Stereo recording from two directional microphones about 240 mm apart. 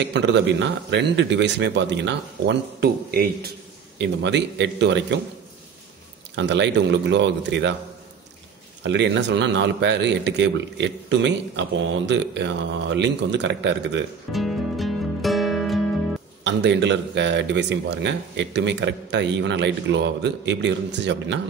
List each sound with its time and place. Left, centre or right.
0.0 s speech: right
6.3 s speech: right
8.8 s speech: right
14.3 s music: centre
16.4 s speech: right